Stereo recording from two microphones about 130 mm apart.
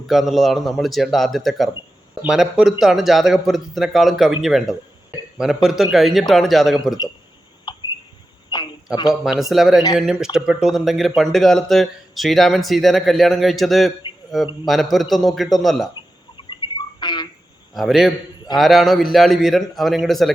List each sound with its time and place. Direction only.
0.1 s speech: centre (ahead or behind)
7.7 s a sound: 35° left (ahead or behind)
9.2 s speech: centre (ahead or behind)
16.5 s frog: 35° left (ahead or behind)
17.7 s speech: centre (ahead or behind)